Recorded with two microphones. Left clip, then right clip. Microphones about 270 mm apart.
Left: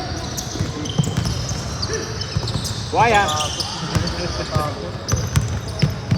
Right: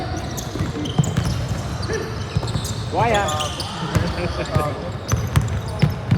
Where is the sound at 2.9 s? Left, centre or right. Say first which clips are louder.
Left 4 dB; centre.